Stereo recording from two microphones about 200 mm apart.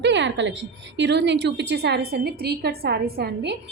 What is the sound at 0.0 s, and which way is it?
A woman's voice, 60° right (ahead or behind).